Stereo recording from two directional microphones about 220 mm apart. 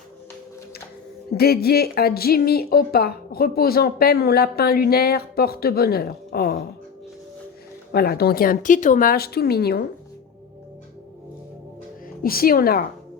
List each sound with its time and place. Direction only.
1.3 s speech: 45° left (ahead or behind)
7.9 s speech: 45° left (ahead or behind)
12.0 s a woman's voice: 40° left (ahead or behind)